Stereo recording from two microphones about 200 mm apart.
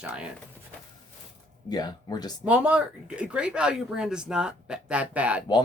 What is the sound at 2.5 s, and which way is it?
Speech, 5° right (ahead or behind).